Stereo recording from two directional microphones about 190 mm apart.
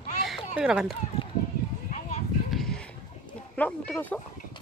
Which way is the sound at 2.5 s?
Centre (ahead or behind).